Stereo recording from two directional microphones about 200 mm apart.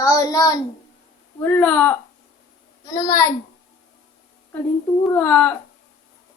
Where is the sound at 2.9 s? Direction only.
15° left (ahead or behind).